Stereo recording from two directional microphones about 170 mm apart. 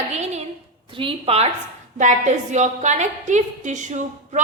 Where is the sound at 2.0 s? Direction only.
45° right (ahead or behind).